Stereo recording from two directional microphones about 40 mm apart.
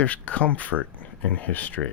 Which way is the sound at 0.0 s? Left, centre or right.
Left.